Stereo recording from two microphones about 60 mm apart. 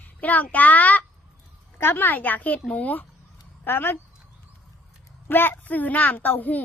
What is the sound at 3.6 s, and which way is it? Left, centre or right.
Speech, left.